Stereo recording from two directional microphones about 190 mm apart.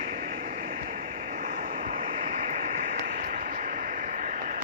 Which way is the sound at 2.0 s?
30° right (ahead or behind).